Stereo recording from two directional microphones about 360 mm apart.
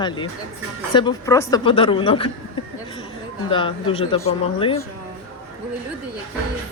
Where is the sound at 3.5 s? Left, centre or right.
Centre.